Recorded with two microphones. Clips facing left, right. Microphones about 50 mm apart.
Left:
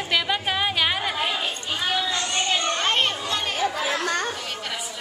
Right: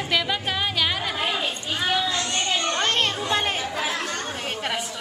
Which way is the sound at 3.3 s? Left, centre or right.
Right.